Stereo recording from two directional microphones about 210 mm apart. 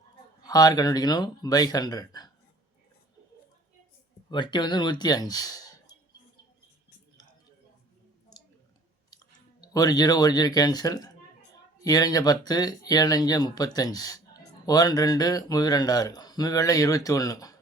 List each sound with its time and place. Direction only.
0.4 s speech: 20° left (ahead or behind)
4.3 s speech: 20° left (ahead or behind)
9.0 s speech: 15° left (ahead or behind)